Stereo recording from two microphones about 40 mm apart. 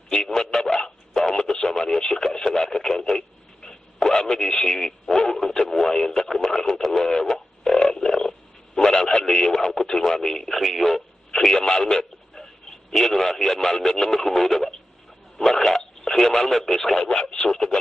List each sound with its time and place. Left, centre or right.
0.1 s telephone: centre
4.7 s radio: centre
11.3 s a sound: centre
12.9 s radio: centre
17.0 s radio: left